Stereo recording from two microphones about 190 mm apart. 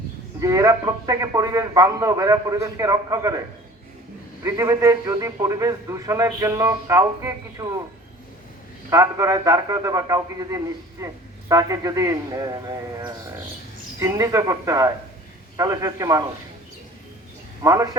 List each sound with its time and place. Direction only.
0.3 s a man's voice: 15° right (ahead or behind)
4.4 s a man's voice: 15° right (ahead or behind)
8.9 s a man's voice: 20° right (ahead or behind)
17.6 s a man's voice: 20° right (ahead or behind)